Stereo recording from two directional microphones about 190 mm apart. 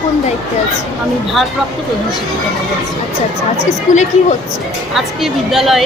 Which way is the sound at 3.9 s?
40° left (ahead or behind).